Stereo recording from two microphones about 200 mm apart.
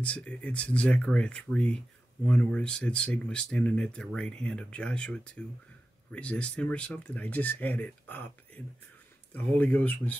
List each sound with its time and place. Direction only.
0.0 s speech: 5° left (ahead or behind)